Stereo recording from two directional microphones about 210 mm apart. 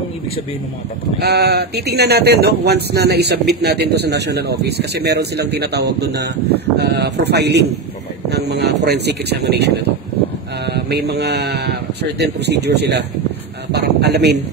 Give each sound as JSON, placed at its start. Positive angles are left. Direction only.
{"t": 1.2, "sound": "speech", "side_deg": -50}
{"t": 10.7, "sound": "speech", "side_deg": -50}